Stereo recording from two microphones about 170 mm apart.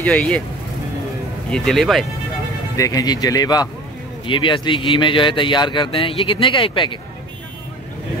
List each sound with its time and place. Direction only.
0.0 s speech: 10° left (ahead or behind)
1.5 s speech: centre (ahead or behind)
2.8 s speech: 20° left (ahead or behind)